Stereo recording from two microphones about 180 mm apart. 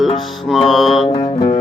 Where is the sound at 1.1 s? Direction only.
30° left (ahead or behind).